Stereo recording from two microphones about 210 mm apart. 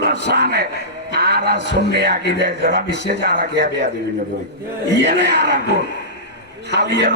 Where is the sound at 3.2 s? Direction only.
55° right (ahead or behind).